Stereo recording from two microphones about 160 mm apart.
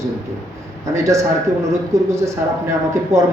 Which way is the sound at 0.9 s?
20° right (ahead or behind).